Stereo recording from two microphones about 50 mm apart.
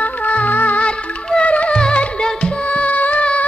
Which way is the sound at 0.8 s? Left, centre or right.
Left.